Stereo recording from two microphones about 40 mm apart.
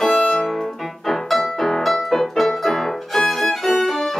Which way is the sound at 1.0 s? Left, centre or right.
Centre.